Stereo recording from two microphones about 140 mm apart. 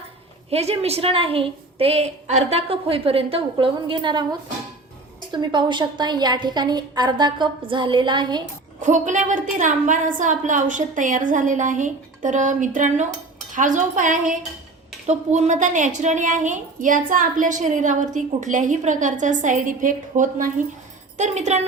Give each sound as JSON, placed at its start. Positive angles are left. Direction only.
{"t": 0.5, "sound": "a woman's voice", "side_deg": -45}
{"t": 8.8, "sound": "a woman's voice", "side_deg": -60}
{"t": 15.0, "sound": "a woman's voice", "side_deg": -55}
{"t": 21.2, "sound": "a woman's voice", "side_deg": -55}